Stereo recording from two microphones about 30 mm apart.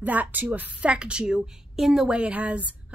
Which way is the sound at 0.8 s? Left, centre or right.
Right.